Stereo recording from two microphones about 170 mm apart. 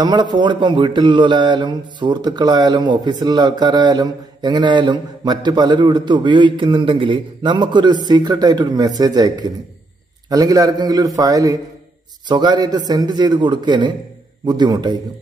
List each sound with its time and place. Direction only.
0.0 s speech: 25° right (ahead or behind)